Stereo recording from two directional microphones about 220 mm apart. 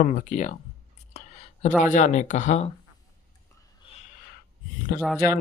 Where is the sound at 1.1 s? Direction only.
30° left (ahead or behind).